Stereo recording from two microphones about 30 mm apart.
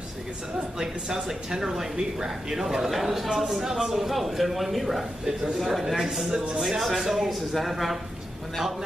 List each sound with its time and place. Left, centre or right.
0.7 s a man's voice: centre
6.2 s speech: right
6.6 s a man's voice: centre